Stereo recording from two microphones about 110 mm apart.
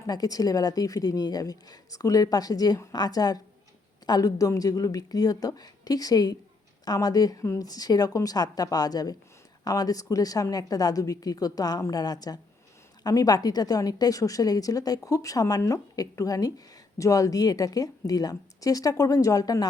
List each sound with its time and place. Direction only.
0.0 s a woman's voice: 35° left (ahead or behind)